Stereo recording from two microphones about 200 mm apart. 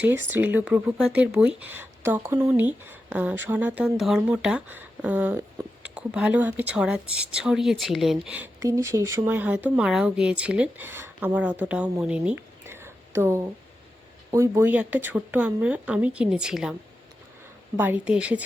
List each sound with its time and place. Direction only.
0.0 s speech: 10° right (ahead or behind)
17.7 s speech: 10° right (ahead or behind)